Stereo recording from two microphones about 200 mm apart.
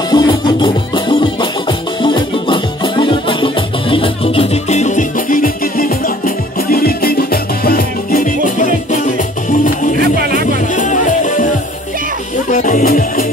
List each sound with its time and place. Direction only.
0.1 s music: 20° left (ahead or behind); by 10.0 s 40° left (ahead or behind)
10.0 s music: 50° right (ahead or behind)
10.7 s music: 40° left (ahead or behind)
12.5 s music: 40° left (ahead or behind)